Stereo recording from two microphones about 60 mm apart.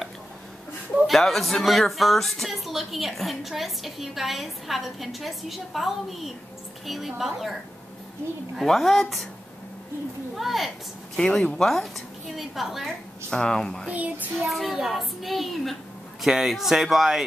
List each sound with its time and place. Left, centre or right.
1.0 s speech: centre
8.5 s speech: centre
10.3 s a woman's voice: centre
11.1 s speech: centre
13.3 s speech: centre
13.8 s child singing: right
14.4 s a woman's voice: centre